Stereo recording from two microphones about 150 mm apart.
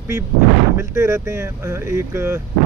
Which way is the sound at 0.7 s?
20° right (ahead or behind).